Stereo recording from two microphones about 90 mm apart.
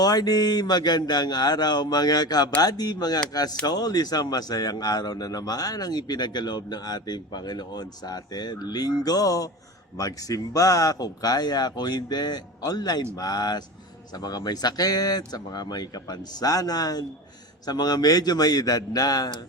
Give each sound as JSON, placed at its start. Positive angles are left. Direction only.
{"t": 0.0, "sound": "a man's voice", "side_deg": 45}